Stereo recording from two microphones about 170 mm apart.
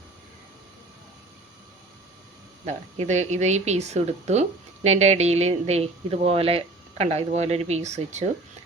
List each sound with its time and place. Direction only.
2.6 s speech: 45° right (ahead or behind)